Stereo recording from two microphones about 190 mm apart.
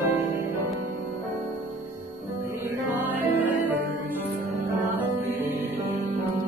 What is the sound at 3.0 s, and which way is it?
Music, 10° right (ahead or behind).